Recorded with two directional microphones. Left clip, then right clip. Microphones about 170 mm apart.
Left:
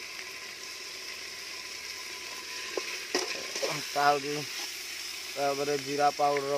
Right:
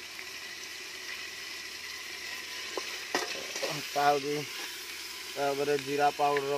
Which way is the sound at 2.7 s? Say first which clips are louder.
Left 1 dB; 25° left (ahead or behind).